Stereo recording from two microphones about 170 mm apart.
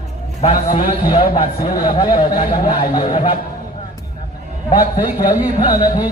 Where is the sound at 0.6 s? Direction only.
50° left (ahead or behind).